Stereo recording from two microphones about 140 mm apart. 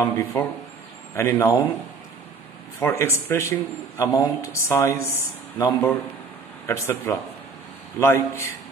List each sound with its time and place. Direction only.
0.0 s speech: 20° left (ahead or behind)
2.8 s speech: 20° left (ahead or behind)